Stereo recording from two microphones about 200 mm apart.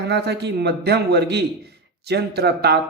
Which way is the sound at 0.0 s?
55° right (ahead or behind).